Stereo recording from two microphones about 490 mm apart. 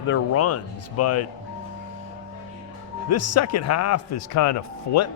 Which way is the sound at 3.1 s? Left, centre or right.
Left.